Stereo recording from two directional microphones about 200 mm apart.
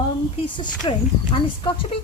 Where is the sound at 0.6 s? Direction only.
25° left (ahead or behind).